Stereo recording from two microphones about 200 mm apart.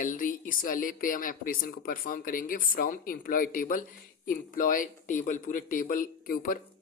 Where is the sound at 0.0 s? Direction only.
40° left (ahead or behind).